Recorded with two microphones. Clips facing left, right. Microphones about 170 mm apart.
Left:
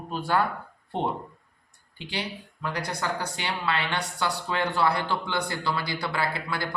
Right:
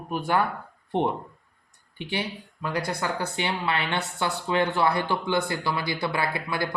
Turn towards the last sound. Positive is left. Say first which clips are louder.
# right 1 dB
turn(degrees=-25)  # may be behind; listen again after turning